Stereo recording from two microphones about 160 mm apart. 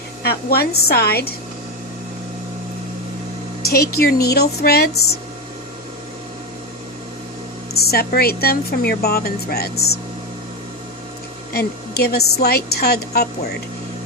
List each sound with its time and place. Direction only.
0.2 s a woman's voice: 85° left
3.6 s a woman's voice: 75° left (ahead or behind)
7.7 s a woman's voice: 80° left
11.5 s a woman's voice: 85° left